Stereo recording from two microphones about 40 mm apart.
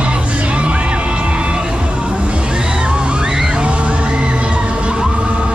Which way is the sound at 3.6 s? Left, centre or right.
Right.